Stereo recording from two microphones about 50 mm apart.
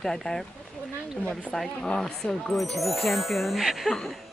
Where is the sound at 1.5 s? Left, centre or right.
Centre.